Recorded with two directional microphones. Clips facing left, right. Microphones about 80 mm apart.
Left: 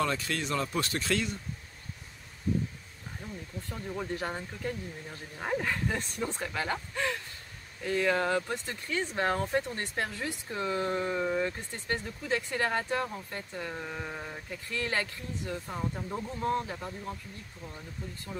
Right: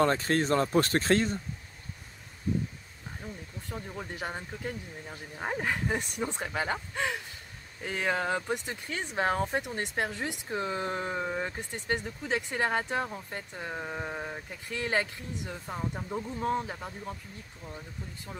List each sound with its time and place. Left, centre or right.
0.0 s speech: right
4.1 s speech: centre